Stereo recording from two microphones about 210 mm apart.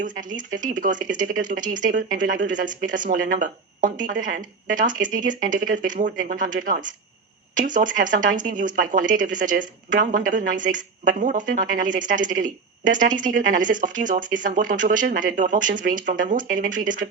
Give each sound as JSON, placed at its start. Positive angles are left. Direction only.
{"t": 0.0, "sound": "speech", "side_deg": -40}